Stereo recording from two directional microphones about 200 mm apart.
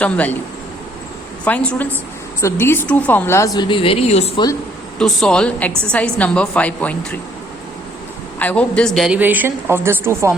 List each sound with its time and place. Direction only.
0.0 s a woman's voice: 5° left (ahead or behind)
1.5 s a woman's voice: 5° left (ahead or behind); by 4.4 s 30° left (ahead or behind)
4.9 s a woman's voice: 5° left (ahead or behind)
8.4 s a woman's voice: 5° left (ahead or behind); by 10.3 s 15° right (ahead or behind)